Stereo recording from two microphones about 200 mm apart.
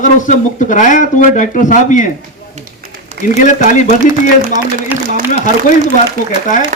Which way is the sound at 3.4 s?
40° left (ahead or behind).